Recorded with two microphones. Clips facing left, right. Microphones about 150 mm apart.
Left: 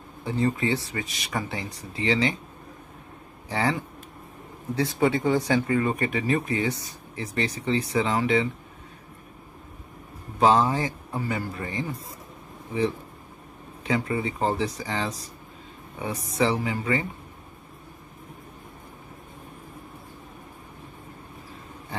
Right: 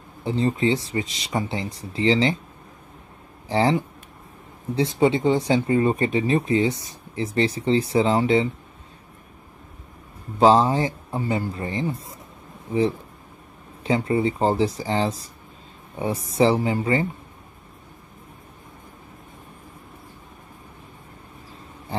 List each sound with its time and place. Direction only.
0.2 s speech: 25° right (ahead or behind)
3.4 s speech: 25° right (ahead or behind)
10.4 s speech: 25° right (ahead or behind)
13.8 s speech: 30° right (ahead or behind)